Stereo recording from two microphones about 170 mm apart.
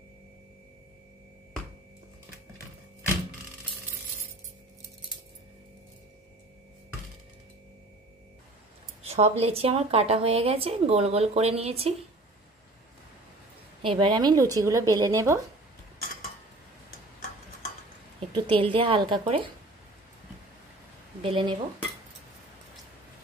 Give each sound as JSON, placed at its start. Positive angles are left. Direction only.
{"t": 9.0, "sound": "speech", "side_deg": -40}
{"t": 13.8, "sound": "a woman's voice", "side_deg": -30}
{"t": 18.3, "sound": "speech", "side_deg": -30}
{"t": 21.2, "sound": "speech", "side_deg": -30}